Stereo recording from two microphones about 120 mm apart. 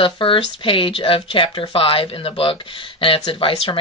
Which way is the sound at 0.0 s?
45° left (ahead or behind).